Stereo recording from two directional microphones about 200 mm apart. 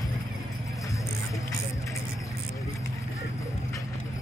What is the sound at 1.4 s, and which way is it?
Vehicle, 15° left (ahead or behind).